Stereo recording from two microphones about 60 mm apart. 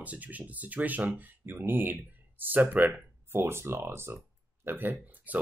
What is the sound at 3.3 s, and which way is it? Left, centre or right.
Speech, right.